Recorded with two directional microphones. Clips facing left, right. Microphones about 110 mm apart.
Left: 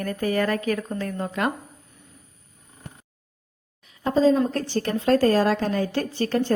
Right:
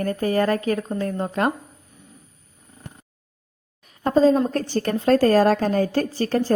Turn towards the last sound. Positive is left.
turn(degrees=-35)  # may be behind; listen again after turning